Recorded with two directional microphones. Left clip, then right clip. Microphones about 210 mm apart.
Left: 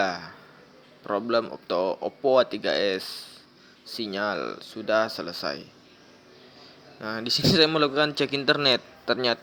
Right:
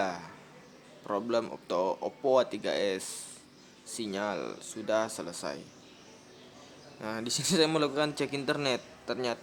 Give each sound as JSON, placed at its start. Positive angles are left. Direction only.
{"t": 0.0, "sound": "a man's voice", "side_deg": 10}
{"t": 7.0, "sound": "a man's voice", "side_deg": 10}